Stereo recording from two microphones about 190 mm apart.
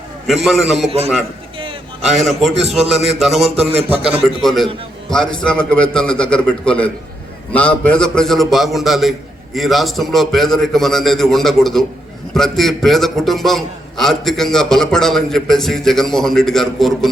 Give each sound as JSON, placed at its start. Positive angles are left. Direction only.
{"t": 0.3, "sound": "a man's voice", "side_deg": 0}
{"t": 0.9, "sound": "a man's voice", "side_deg": -30}
{"t": 2.6, "sound": "a man's voice", "side_deg": -35}
{"t": 3.2, "sound": "a man's voice", "side_deg": 0}
{"t": 3.4, "sound": "a man's voice", "side_deg": -35}
{"t": 4.4, "sound": "a man's voice", "side_deg": 0}